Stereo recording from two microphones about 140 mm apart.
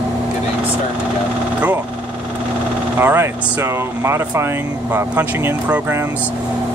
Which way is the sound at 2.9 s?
15° right (ahead or behind).